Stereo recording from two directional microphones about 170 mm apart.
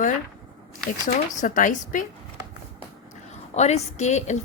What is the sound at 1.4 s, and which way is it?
Speech, 50° left (ahead or behind).